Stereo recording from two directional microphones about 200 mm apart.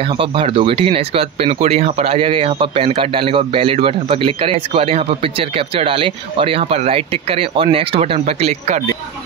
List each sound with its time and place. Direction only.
0.2 s speech: 25° right (ahead or behind)